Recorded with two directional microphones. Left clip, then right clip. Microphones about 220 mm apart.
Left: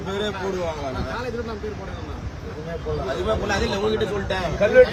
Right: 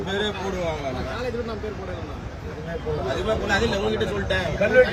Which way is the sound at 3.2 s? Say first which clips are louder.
Right 1 dB; 10° left (ahead or behind).